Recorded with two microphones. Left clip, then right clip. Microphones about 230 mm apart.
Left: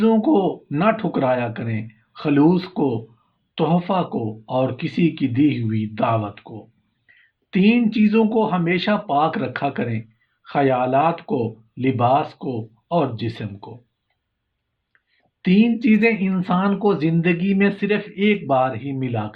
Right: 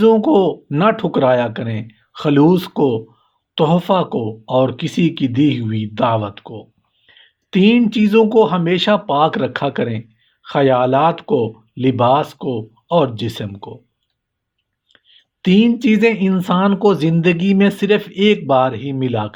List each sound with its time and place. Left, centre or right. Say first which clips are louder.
0.0 s speech: right 6 dB; right
14.9 s speech: right 11 dB; right